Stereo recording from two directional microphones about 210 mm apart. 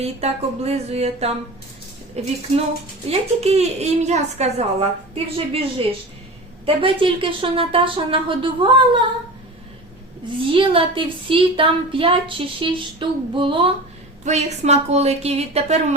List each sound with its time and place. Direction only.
0.0 s a woman's voice: 30° right (ahead or behind)
6.7 s speech: 25° right (ahead or behind)
10.5 s a woman's voice: 25° right (ahead or behind)